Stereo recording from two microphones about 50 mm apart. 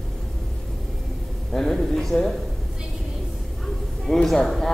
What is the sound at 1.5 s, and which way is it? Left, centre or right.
Speech, centre.